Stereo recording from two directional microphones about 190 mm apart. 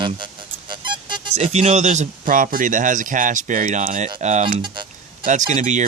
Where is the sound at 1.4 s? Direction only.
40° right (ahead or behind).